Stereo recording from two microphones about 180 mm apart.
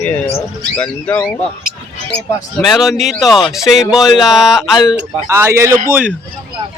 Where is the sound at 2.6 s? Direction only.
Centre (ahead or behind).